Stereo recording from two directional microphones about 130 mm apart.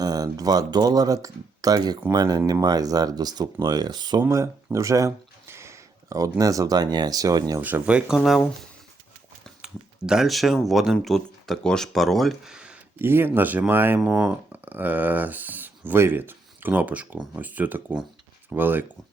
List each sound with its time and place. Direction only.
0.0 s speech: 30° right (ahead or behind)
4.2 s a sound: 25° right (ahead or behind)
6.4 s speech: 25° right (ahead or behind)
7.6 s speech: 10° right (ahead or behind)
10.1 s speech: centre (ahead or behind)
13.0 s speech: 15° right (ahead or behind)